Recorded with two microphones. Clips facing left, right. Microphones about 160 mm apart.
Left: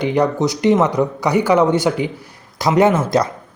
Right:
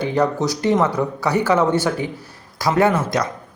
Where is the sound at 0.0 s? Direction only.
15° left (ahead or behind).